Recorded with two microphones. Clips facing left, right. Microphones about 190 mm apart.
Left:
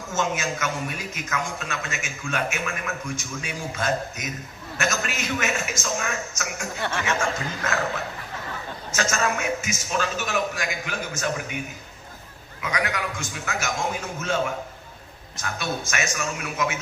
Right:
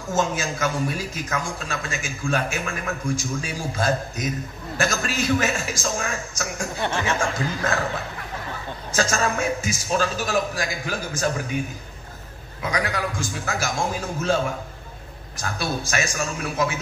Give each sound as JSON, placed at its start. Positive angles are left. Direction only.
{"t": 0.1, "sound": "a man's voice", "side_deg": -35}
{"t": 8.9, "sound": "a man's voice", "side_deg": -35}
{"t": 12.6, "sound": "a man's voice", "side_deg": -35}